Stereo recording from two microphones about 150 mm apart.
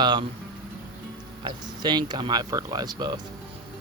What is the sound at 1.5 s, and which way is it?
Speech, 30° right (ahead or behind).